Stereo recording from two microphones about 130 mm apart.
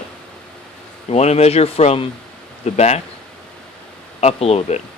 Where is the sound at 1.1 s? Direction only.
55° left (ahead or behind).